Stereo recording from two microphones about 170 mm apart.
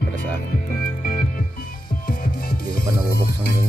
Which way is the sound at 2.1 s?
60° left (ahead or behind).